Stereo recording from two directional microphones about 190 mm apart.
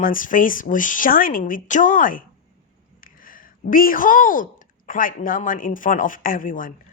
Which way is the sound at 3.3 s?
45° left (ahead or behind).